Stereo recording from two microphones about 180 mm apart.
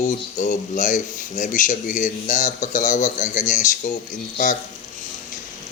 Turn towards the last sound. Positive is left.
turn(degrees=45)  # may be behind; listen again after turning